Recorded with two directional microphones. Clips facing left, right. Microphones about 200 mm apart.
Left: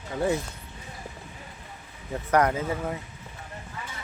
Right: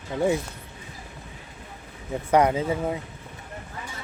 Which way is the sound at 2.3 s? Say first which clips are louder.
Right 3 dB; 15° right (ahead or behind).